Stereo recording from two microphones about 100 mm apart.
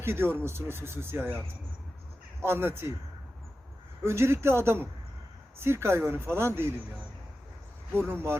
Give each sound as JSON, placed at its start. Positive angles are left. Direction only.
{"t": 0.0, "sound": "speech", "side_deg": -25}
{"t": 2.4, "sound": "speech", "side_deg": -25}
{"t": 4.0, "sound": "speech", "side_deg": -25}
{"t": 8.0, "sound": "speech", "side_deg": -25}